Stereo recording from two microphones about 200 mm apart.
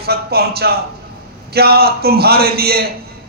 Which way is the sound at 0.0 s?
50° right (ahead or behind).